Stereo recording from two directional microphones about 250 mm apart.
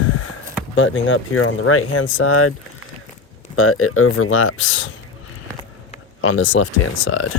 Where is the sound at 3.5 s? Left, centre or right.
Left.